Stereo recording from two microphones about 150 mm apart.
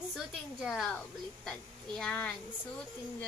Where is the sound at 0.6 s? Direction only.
Centre (ahead or behind).